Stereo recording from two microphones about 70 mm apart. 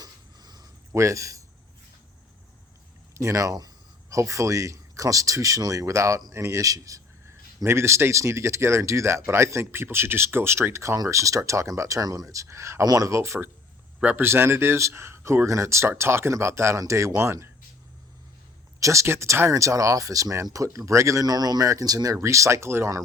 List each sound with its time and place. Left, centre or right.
0.0 s dog: right
0.9 s a man's voice: right
3.2 s speech: right
4.1 s speech: right
7.3 s speech: right
12.8 s speech: right
14.0 s speech: right
18.8 s speech: right
21.2 s speech: right